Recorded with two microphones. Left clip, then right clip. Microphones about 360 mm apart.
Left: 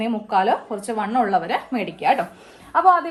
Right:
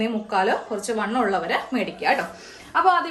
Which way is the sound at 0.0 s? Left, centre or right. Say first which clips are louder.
Left 2 dB; centre.